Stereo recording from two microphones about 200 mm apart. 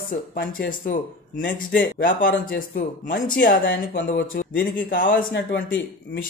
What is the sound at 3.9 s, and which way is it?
Speech, 65° left (ahead or behind).